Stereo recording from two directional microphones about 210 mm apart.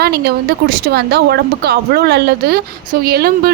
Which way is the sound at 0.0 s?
50° right (ahead or behind).